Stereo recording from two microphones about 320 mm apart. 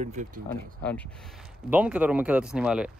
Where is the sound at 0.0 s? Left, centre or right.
Right.